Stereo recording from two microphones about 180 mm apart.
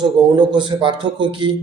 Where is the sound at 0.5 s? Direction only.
25° right (ahead or behind).